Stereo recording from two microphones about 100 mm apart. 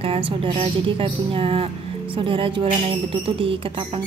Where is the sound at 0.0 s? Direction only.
70° right (ahead or behind).